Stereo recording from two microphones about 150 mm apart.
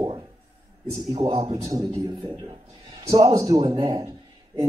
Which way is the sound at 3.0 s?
25° right (ahead or behind).